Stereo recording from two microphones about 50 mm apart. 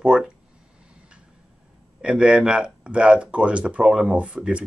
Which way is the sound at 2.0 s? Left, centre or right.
Centre.